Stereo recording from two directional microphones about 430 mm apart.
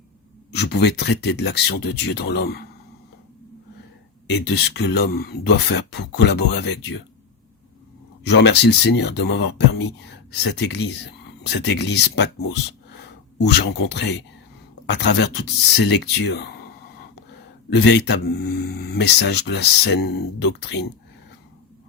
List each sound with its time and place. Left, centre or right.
0.5 s speech: left
4.5 s speech: left
8.3 s speech: left
13.5 s speech: left
17.7 s speech: left